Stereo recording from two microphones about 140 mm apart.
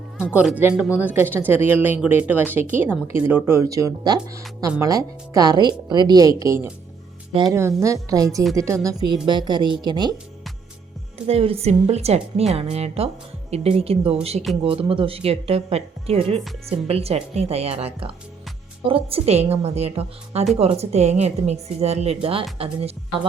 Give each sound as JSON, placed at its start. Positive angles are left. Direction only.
{"t": 0.3, "sound": "a woman's voice", "side_deg": -10}
{"t": 11.3, "sound": "a woman's voice", "side_deg": -45}